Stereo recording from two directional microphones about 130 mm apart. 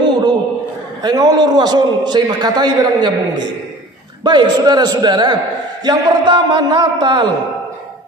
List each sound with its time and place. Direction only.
0.0 s a sound: 30° right (ahead or behind)
1.0 s a man's voice: 30° right (ahead or behind)
4.2 s a man's voice: 35° right (ahead or behind)